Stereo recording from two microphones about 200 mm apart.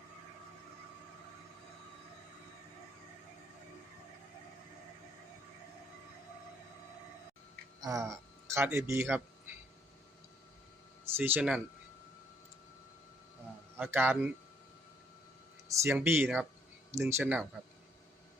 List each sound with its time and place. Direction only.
7.8 s a man's voice: 15° right (ahead or behind)
11.2 s speech: 5° right (ahead or behind)
13.7 s speech: 10° right (ahead or behind)
15.7 s speech: 10° right (ahead or behind)